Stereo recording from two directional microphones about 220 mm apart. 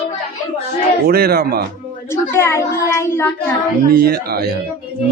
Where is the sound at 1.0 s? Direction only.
45° right (ahead or behind).